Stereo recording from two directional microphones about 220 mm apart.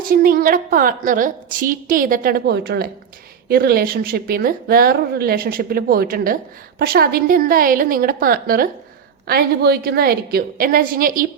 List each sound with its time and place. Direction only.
0.0 s a woman's voice: 40° right (ahead or behind)